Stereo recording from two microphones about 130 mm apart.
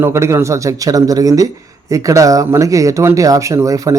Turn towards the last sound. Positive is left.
turn(degrees=-25)  # may be behind; listen again after turning